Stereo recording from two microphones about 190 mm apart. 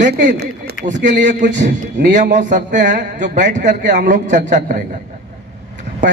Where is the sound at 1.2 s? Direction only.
40° right (ahead or behind).